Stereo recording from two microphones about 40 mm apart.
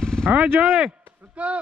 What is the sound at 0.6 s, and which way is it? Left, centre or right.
Speech, right.